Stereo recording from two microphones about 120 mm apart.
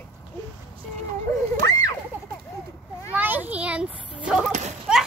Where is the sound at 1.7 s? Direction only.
30° left (ahead or behind).